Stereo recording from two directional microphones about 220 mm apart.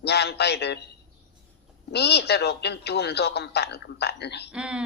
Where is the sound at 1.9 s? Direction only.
50° left (ahead or behind).